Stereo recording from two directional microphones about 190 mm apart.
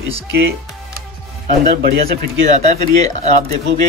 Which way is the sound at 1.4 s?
50° right (ahead or behind).